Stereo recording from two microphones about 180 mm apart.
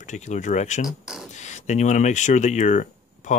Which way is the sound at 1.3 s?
40° left (ahead or behind).